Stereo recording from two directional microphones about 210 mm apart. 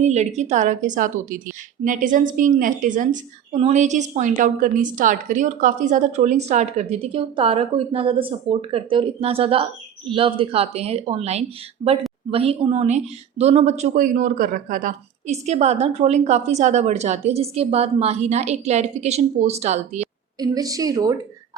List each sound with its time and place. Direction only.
0.0 s a woman's voice: 35° right (ahead or behind)
20.4 s a woman's voice: 15° right (ahead or behind)